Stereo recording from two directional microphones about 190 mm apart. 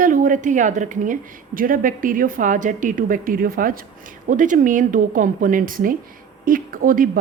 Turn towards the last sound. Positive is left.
turn(degrees=-50)  # may be behind; listen again after turning